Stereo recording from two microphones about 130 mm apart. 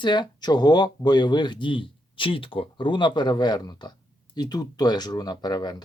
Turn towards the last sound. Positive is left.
turn(degrees=30)  # may be behind; listen again after turning